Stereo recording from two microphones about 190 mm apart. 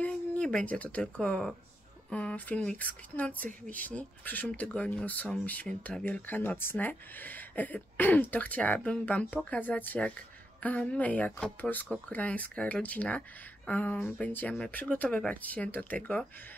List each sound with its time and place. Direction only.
0.0 s speech: 5° left (ahead or behind)